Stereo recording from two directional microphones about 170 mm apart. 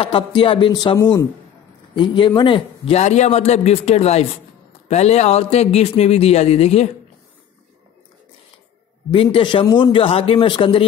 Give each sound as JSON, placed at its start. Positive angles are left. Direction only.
{"t": 0.0, "sound": "speech", "side_deg": 30}
{"t": 9.1, "sound": "speech", "side_deg": 30}